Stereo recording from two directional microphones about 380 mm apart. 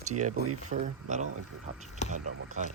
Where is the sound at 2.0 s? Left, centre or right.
Centre.